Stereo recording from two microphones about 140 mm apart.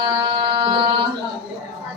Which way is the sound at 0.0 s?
35° right (ahead or behind).